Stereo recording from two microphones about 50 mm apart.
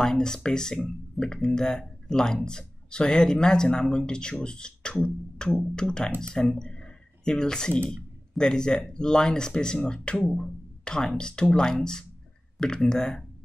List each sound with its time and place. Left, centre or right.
0.0 s speech: centre